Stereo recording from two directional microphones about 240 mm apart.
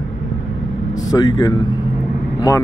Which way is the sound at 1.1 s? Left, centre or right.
Centre.